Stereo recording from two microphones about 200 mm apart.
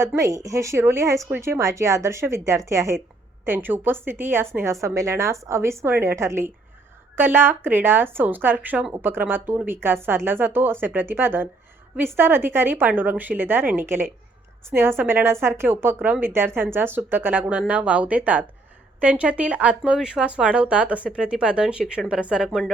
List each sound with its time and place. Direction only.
0.0 s a woman's voice: 15° right (ahead or behind)